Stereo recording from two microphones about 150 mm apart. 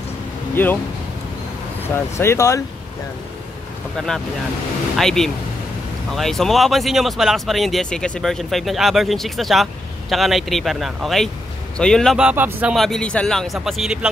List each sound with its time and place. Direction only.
0.6 s speech: 15° left (ahead or behind)
2.1 s speech: 20° left (ahead or behind)
4.9 s speech: centre (ahead or behind)
12.2 s speech: 10° right (ahead or behind)
12.7 s speech: centre (ahead or behind)